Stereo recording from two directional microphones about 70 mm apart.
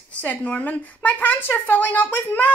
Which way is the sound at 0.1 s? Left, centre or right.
Centre.